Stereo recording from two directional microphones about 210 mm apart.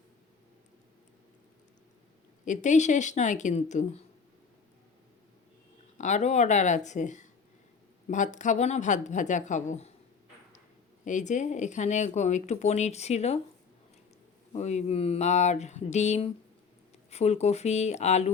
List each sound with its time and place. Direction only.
2.4 s speech: 35° left (ahead or behind)
6.0 s speech: 35° left (ahead or behind)
11.0 s speech: 35° left (ahead or behind)
14.5 s speech: 35° left (ahead or behind)